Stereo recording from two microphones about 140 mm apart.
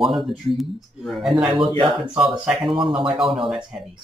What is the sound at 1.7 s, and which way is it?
Speech, 35° right (ahead or behind).